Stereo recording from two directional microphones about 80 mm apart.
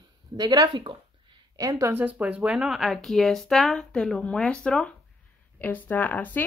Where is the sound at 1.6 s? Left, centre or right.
Right.